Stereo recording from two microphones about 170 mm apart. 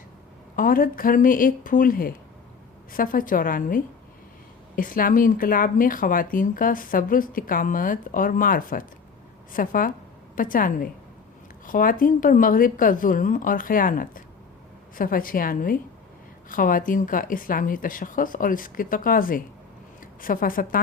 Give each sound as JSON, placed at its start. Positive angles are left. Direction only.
{"t": 0.5, "sound": "a woman's voice", "side_deg": 55}
{"t": 4.8, "sound": "a woman's voice", "side_deg": 55}